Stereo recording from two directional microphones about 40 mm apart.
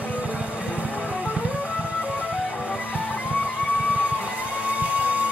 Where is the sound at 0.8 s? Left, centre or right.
Right.